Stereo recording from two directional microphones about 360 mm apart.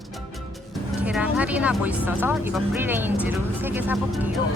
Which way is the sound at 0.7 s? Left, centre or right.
Centre.